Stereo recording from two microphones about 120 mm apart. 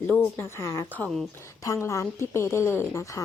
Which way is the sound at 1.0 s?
5° left (ahead or behind).